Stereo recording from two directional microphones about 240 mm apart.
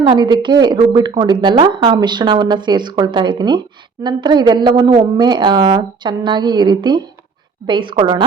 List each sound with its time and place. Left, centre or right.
0.0 s a woman's voice: centre